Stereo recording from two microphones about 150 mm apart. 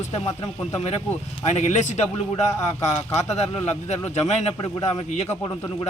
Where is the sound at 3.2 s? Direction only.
45° left (ahead or behind).